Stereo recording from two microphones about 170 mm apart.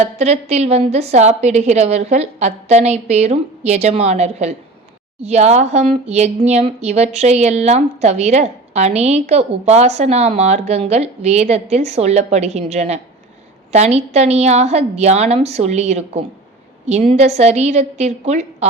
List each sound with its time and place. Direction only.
0.0 s a woman's voice: 40° right (ahead or behind)